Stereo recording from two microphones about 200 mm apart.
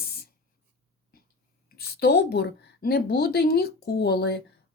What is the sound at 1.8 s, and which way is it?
Speech, 55° left (ahead or behind).